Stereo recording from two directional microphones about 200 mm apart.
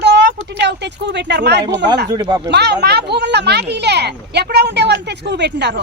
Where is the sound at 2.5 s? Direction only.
55° right (ahead or behind).